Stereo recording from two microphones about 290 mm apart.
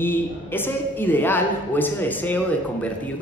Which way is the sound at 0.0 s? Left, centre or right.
Centre.